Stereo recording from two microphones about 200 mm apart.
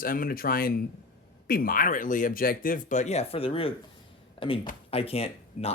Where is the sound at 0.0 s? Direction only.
45° left (ahead or behind).